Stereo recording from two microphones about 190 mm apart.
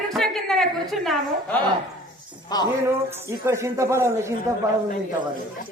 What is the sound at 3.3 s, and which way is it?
Speech, 15° right (ahead or behind).